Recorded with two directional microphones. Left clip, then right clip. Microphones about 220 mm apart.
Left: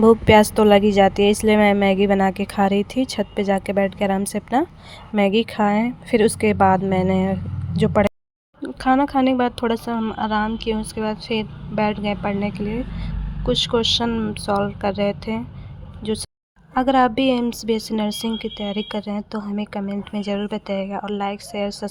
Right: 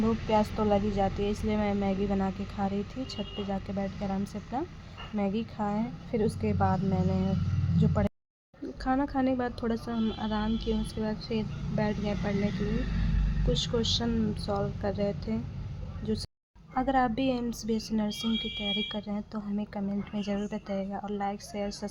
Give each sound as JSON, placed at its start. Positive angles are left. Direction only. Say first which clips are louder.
{"t": 0.0, "sound": "a woman's voice", "louder": "left 15 dB", "side_deg": 50}
{"t": 13.5, "sound": "speech", "louder": "left 11 dB", "side_deg": 30}